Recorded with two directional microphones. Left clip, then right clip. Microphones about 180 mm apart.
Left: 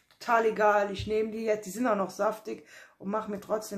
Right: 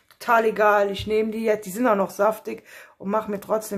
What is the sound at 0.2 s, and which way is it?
Speech, 30° right (ahead or behind).